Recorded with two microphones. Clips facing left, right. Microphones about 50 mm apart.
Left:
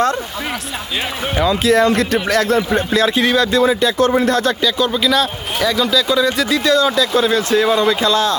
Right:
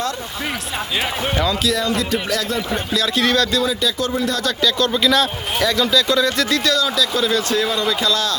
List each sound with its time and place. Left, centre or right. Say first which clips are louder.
1.6 s speech: left 7 dB; left
2.6 s speech: left 6 dB; left
3.2 s speech: left 3 dB; centre
3.5 s speech: left 6 dB; left
4.6 s speech: left 1 dB; centre
6.7 s speech: left 5 dB; left